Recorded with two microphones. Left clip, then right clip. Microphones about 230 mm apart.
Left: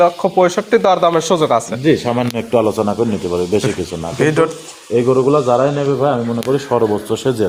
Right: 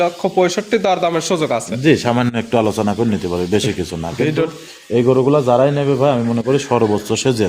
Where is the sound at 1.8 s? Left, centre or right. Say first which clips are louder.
Even; right.